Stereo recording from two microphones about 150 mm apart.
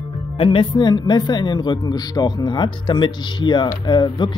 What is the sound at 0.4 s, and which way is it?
Speech, 35° left (ahead or behind).